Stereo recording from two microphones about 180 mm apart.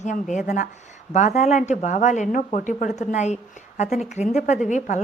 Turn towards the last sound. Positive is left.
turn(degrees=40)  # may be behind; listen again after turning